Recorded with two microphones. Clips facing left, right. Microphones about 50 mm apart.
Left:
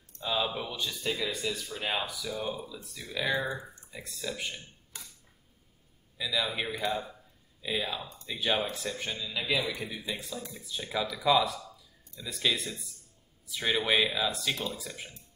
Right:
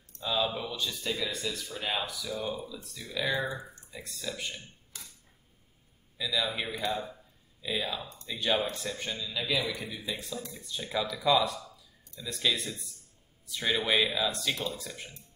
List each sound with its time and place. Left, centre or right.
0.2 s speech: centre
4.9 s camera: left
6.1 s speech: centre
9.1 s speech: centre